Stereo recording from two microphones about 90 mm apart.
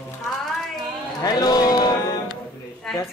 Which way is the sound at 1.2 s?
45° left (ahead or behind).